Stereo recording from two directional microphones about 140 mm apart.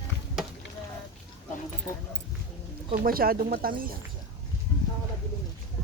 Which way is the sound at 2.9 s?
90° right.